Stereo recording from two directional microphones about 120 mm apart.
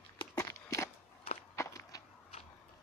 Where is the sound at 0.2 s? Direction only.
30° left (ahead or behind).